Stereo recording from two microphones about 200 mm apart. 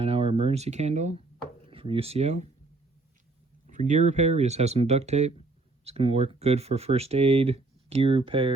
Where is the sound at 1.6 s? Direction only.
25° right (ahead or behind).